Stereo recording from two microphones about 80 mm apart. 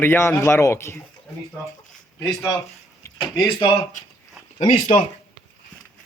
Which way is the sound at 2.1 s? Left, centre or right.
Left.